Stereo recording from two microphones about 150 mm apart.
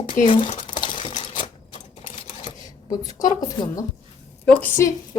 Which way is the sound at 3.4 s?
25° left (ahead or behind).